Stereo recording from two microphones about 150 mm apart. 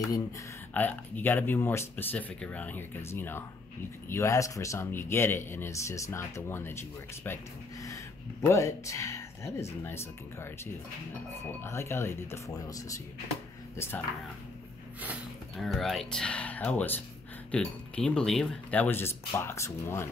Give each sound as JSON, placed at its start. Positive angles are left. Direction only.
{"t": 0.7, "sound": "speech", "side_deg": 10}
{"t": 15.5, "sound": "speech", "side_deg": 0}